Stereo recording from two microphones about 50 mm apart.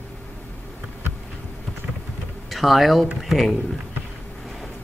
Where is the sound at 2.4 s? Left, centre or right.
Centre.